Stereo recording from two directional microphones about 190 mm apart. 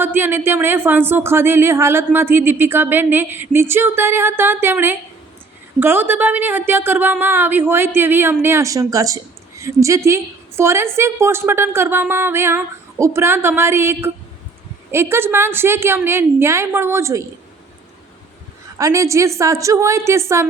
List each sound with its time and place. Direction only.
0.0 s a woman's voice: 10° right (ahead or behind)
18.8 s a woman's voice: 15° right (ahead or behind)